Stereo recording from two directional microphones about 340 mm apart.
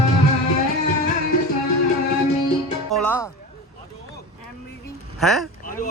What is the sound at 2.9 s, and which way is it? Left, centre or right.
Music, centre.